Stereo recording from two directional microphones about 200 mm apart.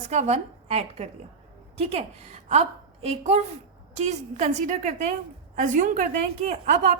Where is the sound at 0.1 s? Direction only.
35° right (ahead or behind).